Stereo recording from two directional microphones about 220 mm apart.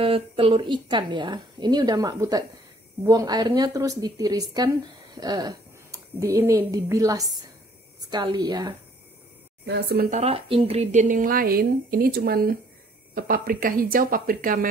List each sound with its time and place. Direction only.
0.0 s a woman's voice: 25° right (ahead or behind)
9.7 s speech: 50° right (ahead or behind)
10.1 s a woman's voice: 25° right (ahead or behind)